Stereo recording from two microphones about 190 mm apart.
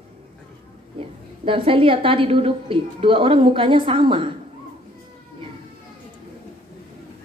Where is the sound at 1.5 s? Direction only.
30° right (ahead or behind).